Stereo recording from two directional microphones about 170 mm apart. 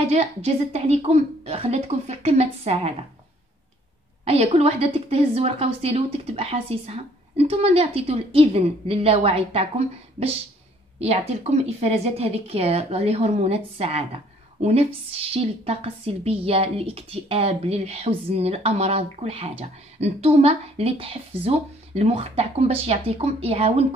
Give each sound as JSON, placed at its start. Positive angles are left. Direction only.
{"t": 0.1, "sound": "a woman's voice", "side_deg": -35}
{"t": 4.2, "sound": "a woman's voice", "side_deg": -35}